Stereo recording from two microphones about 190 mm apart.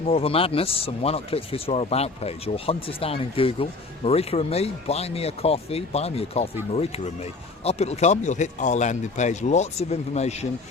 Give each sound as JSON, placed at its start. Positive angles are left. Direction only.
{"t": 0.1, "sound": "speech", "side_deg": 30}